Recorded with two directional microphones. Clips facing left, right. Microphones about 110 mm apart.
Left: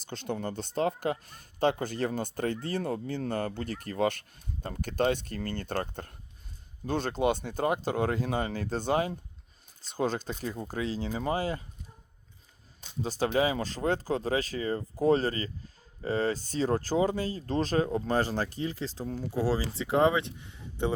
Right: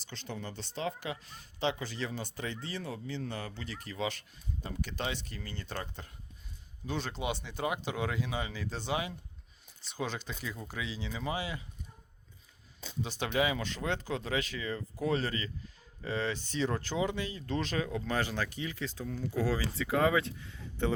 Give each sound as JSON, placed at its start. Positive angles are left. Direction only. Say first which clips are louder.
{"t": 0.0, "sound": "speech", "louder": "left 8 dB", "side_deg": 50}
{"t": 13.0, "sound": "speech", "louder": "left 4 dB", "side_deg": 35}